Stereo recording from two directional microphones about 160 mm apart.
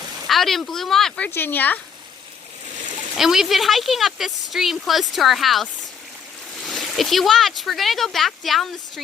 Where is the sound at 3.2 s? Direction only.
Centre (ahead or behind).